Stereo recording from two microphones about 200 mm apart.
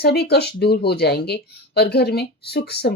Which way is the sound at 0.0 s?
55° left (ahead or behind).